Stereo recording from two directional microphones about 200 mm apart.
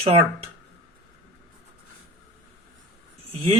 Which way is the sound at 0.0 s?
30° right (ahead or behind).